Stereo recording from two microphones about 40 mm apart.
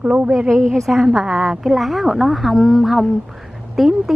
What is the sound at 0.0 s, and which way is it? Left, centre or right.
Speech, right.